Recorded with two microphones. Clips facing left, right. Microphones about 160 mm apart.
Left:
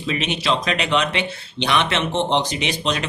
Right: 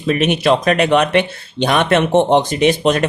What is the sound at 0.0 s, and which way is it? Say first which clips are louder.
Speech: right 8 dB; 50° right (ahead or behind).